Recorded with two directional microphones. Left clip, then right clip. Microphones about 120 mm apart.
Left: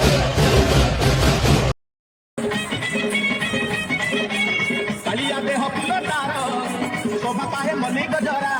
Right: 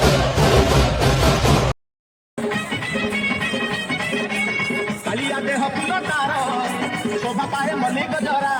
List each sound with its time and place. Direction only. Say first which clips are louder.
0.0 s music: right 1 dB; 15° right (ahead or behind)
5.5 s music: right 2 dB; 15° left (ahead or behind)
7.8 s a sound: right 1 dB; 20° left (ahead or behind)